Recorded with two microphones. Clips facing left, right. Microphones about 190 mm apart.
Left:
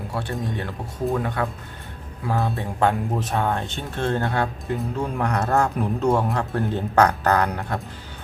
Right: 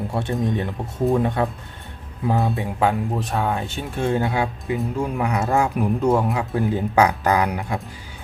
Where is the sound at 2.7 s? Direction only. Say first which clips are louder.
Left 1 dB; centre (ahead or behind).